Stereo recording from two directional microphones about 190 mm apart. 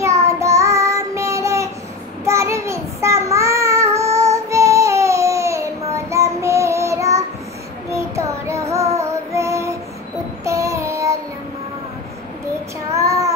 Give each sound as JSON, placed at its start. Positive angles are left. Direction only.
{"t": 0.0, "sound": "child singing", "side_deg": -15}
{"t": 12.9, "sound": "child singing", "side_deg": -15}